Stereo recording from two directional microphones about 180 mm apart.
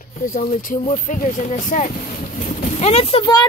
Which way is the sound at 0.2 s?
45° left (ahead or behind).